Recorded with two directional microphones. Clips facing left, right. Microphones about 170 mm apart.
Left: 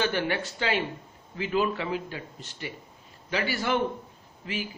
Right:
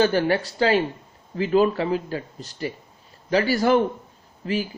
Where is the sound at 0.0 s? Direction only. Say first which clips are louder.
Right 8 dB; 40° right (ahead or behind).